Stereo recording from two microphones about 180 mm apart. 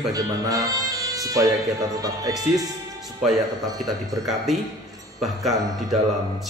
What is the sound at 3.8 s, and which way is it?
Speech, 20° right (ahead or behind).